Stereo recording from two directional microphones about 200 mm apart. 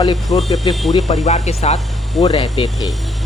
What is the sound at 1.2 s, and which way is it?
Speech, 35° left (ahead or behind).